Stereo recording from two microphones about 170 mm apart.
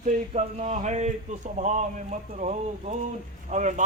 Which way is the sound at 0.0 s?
45° right (ahead or behind).